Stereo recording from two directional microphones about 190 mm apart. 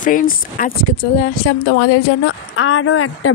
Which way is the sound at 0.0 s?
45° left (ahead or behind).